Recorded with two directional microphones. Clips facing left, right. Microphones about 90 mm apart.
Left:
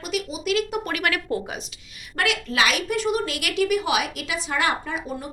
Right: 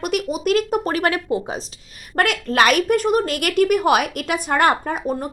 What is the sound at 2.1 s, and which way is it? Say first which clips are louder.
A woman's voice: right 6 dB; 45° right (ahead or behind).